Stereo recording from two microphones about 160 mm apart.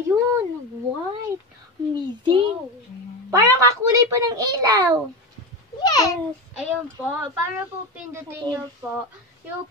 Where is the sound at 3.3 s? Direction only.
20° right (ahead or behind).